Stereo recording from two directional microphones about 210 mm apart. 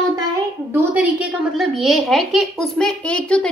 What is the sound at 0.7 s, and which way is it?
A child's voice, 10° right (ahead or behind).